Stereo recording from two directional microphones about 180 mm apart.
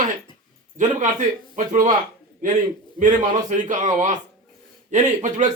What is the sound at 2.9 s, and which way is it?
Speech, 45° right (ahead or behind).